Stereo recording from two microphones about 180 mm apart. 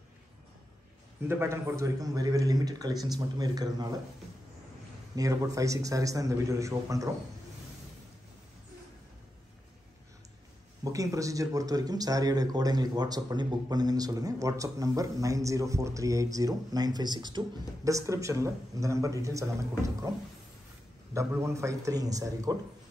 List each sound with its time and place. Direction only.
1.2 s speech: 15° right (ahead or behind)
5.1 s a man's voice: 20° right (ahead or behind)
10.8 s a man's voice: 20° right (ahead or behind)
21.1 s a man's voice: 15° right (ahead or behind)